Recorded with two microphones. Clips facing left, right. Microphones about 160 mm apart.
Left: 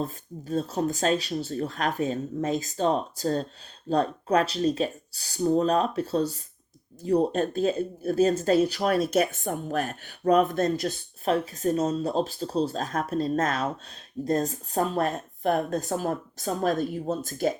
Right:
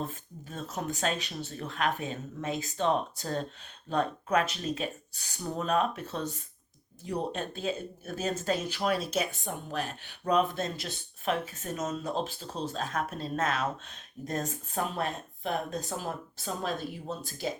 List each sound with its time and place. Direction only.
0.0 s speech: 35° left (ahead or behind)